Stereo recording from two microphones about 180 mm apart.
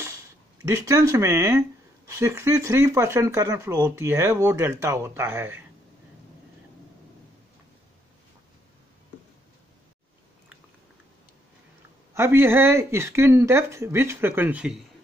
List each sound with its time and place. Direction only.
0.8 s speech: 15° right (ahead or behind)
12.1 s speech: 15° right (ahead or behind)